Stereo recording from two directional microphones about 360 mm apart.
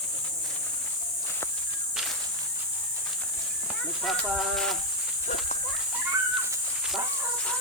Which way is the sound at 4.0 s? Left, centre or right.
Centre.